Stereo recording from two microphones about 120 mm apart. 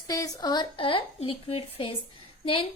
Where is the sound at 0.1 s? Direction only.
30° left (ahead or behind).